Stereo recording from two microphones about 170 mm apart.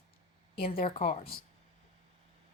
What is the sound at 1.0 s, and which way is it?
Speech, 45° left (ahead or behind).